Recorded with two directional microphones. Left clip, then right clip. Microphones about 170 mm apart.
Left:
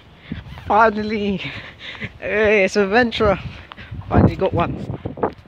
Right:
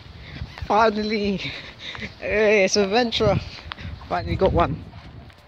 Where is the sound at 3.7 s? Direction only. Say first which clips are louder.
Left 6 dB; 5° left (ahead or behind).